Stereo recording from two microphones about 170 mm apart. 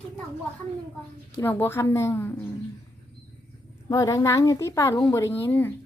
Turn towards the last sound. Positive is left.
turn(degrees=10)  # may be behind; listen again after turning